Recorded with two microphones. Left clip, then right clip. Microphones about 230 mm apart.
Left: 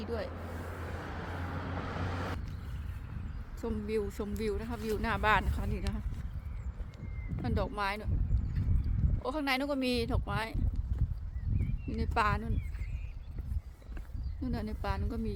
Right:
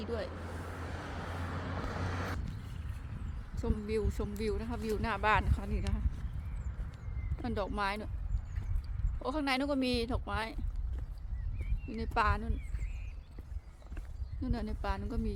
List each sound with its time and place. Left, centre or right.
0.0 s speech: centre
0.3 s vehicle: right
3.6 s speech: centre
7.4 s speech: centre
9.2 s speech: centre
11.9 s speech: centre
14.4 s speech: centre